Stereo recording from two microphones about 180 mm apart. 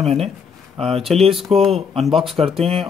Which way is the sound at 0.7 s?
35° right (ahead or behind).